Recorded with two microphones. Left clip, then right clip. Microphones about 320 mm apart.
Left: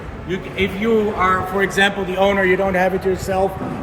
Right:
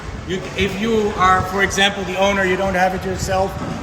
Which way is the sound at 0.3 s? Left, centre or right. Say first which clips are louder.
Even; centre.